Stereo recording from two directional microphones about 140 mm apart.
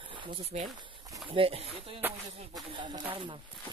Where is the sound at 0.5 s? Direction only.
50° right (ahead or behind).